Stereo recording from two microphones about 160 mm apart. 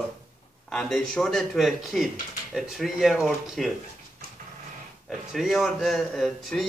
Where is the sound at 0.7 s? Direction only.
5° left (ahead or behind).